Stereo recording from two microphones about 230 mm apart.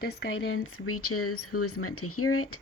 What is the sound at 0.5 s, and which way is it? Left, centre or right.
Speech, left.